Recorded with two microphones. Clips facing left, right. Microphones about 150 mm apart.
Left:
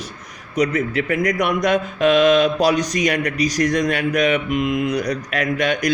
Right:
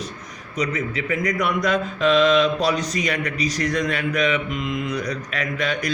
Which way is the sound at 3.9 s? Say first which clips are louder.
Left 4 dB; 60° left (ahead or behind).